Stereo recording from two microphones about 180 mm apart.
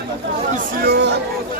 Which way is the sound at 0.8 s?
65° right (ahead or behind).